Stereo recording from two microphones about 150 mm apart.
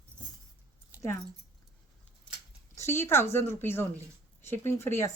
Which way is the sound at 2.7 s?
15° left (ahead or behind).